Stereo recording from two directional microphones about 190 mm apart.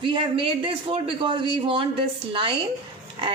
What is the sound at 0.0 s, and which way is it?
A man's voice, 25° right (ahead or behind).